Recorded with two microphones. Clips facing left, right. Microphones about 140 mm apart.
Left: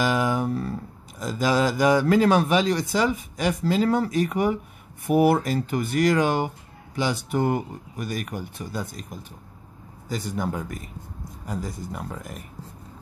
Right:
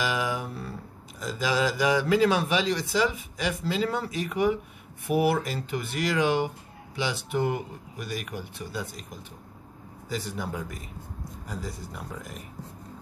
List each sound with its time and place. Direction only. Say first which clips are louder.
0.0 s a sound: left 6 dB; 45° left (ahead or behind)
1.2 s speech: left 4 dB; 45° left (ahead or behind)
10.0 s speech: left 4 dB; 45° left (ahead or behind)